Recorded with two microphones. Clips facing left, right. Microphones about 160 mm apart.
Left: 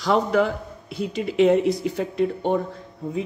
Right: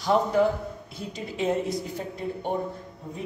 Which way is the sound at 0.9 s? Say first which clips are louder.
Left 12 dB; 75° left (ahead or behind).